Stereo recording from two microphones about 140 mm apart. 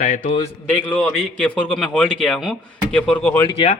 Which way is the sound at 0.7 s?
10° left (ahead or behind).